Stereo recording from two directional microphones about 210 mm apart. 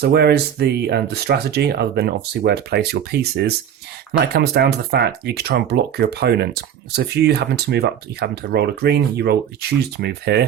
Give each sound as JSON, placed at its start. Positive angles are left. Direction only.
{"t": 0.0, "sound": "speech", "side_deg": -50}